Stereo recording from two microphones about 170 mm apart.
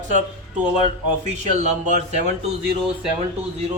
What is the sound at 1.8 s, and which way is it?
Speech, 45° right (ahead or behind).